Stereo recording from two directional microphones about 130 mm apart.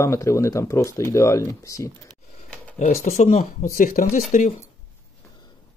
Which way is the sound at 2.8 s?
70° left (ahead or behind).